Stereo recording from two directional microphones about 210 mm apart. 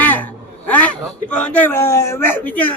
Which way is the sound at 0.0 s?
10° left (ahead or behind).